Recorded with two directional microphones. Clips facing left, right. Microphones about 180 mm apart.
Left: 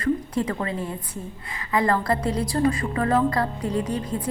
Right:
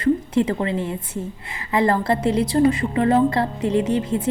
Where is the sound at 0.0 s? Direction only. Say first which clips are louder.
Right 5 dB; 25° right (ahead or behind).